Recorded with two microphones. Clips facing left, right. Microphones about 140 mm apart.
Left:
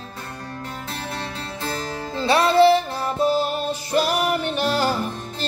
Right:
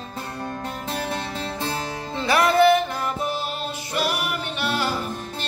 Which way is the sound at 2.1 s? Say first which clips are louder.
Left 2 dB; 30° left (ahead or behind).